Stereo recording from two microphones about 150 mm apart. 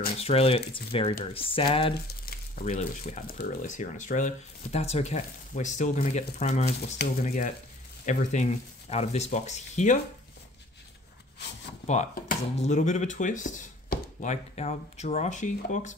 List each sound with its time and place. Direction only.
0.2 s speech: 40° left (ahead or behind)
2.6 s speech: 50° left (ahead or behind)
6.8 s speech: 75° left (ahead or behind)
8.0 s speech: 55° left (ahead or behind)
11.8 s speech: 50° left (ahead or behind)